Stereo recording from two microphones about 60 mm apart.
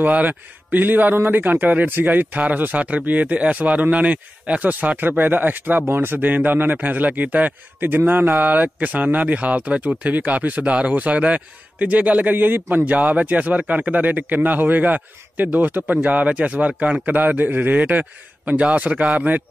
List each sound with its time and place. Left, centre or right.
0.0 s a man's voice: right